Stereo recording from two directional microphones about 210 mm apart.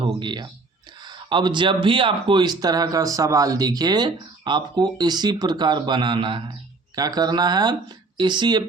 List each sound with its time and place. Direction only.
0.0 s speech: 20° right (ahead or behind)